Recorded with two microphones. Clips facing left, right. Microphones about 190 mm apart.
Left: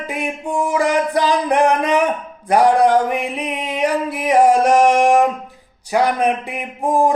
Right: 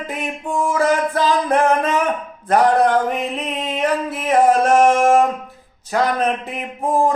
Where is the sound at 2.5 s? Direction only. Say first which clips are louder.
Left 2 dB; 10° left (ahead or behind).